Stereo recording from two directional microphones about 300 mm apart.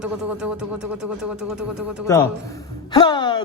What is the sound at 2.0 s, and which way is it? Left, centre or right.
A man's voice, centre.